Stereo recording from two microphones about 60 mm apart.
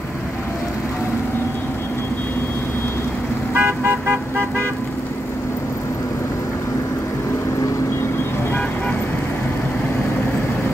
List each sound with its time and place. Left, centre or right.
3.5 s vehicle: right